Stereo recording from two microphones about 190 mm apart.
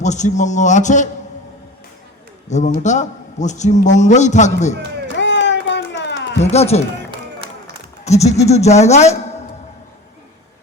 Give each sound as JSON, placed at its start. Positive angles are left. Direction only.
{"t": 0.0, "sound": "a man's voice", "side_deg": 40}
{"t": 2.5, "sound": "a man's voice", "side_deg": 40}
{"t": 5.1, "sound": "a sound", "side_deg": 70}
{"t": 6.4, "sound": "a man's voice", "side_deg": 35}
{"t": 8.0, "sound": "a man's voice", "side_deg": 35}